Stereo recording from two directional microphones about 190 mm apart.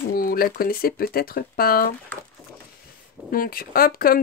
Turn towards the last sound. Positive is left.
turn(degrees=50)  # may be behind; listen again after turning